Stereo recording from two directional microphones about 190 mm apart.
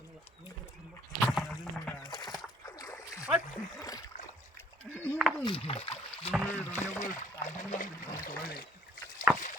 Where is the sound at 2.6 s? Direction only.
15° left (ahead or behind).